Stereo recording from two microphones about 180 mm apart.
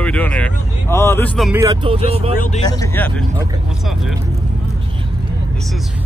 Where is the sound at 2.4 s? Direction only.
40° left (ahead or behind).